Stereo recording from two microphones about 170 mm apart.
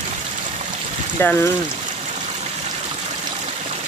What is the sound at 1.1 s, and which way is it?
Speech, 15° left (ahead or behind).